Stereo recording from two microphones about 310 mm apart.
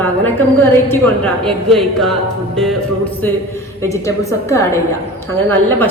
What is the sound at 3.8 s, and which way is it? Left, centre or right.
A woman's voice, centre.